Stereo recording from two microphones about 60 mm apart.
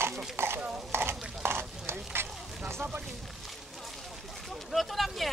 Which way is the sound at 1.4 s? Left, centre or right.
Right.